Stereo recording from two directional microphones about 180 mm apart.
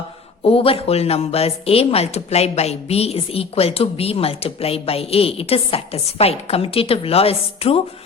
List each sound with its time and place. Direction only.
0.4 s a woman's voice: 30° left (ahead or behind)